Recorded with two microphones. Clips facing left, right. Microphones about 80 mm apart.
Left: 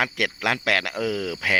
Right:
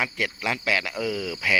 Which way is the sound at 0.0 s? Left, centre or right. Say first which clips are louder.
Left 3 dB; left.